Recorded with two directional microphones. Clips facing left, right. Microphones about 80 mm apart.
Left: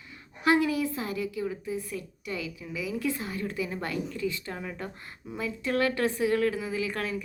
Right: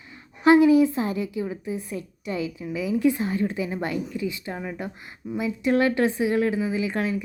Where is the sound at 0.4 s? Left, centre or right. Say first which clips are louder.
Right 9 dB; right.